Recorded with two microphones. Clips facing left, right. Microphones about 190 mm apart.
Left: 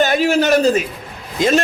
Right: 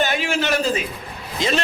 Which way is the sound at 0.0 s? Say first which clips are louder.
Left 7 dB; 40° left (ahead or behind).